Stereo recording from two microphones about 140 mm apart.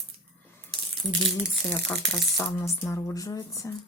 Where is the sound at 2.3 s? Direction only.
15° left (ahead or behind).